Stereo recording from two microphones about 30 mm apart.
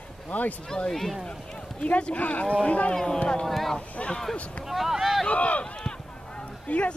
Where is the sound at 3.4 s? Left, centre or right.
Centre.